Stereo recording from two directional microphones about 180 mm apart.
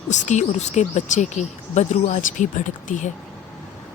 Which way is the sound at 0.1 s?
40° left (ahead or behind).